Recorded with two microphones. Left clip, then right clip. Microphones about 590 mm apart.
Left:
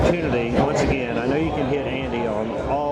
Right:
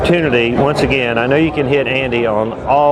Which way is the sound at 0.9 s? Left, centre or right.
Right.